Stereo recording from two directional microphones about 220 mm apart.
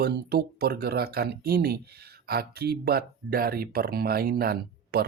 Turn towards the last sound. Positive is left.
turn(degrees=-45)  # may be behind; listen again after turning